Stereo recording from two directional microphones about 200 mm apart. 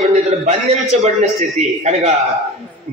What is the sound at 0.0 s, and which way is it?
A man's voice, 35° right (ahead or behind).